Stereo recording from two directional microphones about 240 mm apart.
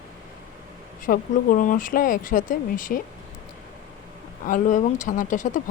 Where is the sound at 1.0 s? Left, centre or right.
Left.